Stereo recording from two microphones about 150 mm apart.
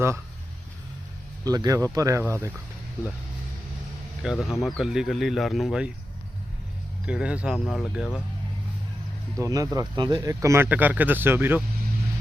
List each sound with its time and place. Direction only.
1.5 s speech: 25° right (ahead or behind)
4.2 s speech: centre (ahead or behind)
7.0 s speech: 10° right (ahead or behind)
9.4 s speech: 20° right (ahead or behind)